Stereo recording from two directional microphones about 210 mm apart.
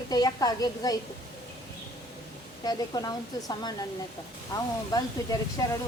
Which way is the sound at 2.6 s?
20° left (ahead or behind).